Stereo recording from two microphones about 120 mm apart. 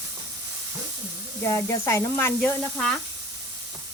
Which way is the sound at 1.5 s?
25° left (ahead or behind).